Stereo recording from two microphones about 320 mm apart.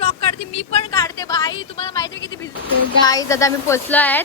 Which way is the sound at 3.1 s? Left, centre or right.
Centre.